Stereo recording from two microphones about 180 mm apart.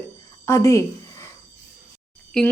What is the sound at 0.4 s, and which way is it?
Speech, 15° left (ahead or behind).